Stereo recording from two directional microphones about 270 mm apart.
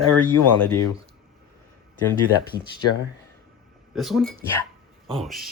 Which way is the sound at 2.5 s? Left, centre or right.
Centre.